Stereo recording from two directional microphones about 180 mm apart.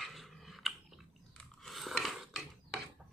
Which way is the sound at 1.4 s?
Centre (ahead or behind).